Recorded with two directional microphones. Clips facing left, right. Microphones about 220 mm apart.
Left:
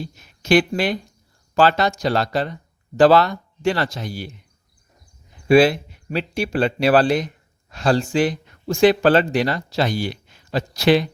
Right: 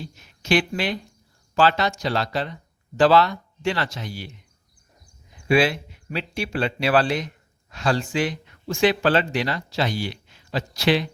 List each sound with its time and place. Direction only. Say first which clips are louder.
0.2 s speech: left 5 dB; 45° left (ahead or behind)
5.5 s speech: left 6 dB; 40° left (ahead or behind)